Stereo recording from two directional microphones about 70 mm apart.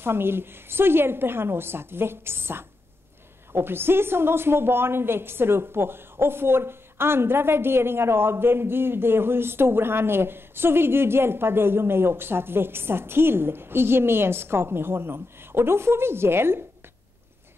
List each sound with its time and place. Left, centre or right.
0.0 s a woman's voice: right